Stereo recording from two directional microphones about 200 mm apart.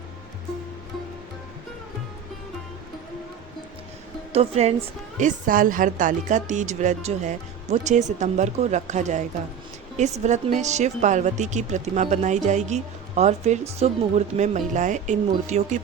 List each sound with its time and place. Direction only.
4.3 s a woman's voice: 30° right (ahead or behind)